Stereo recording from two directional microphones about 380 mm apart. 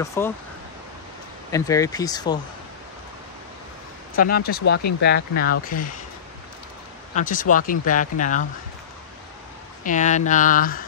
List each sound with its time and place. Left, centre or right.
0.0 s speech: centre
1.5 s speech: centre
4.2 s speech: left
7.2 s speech: left
9.8 s speech: centre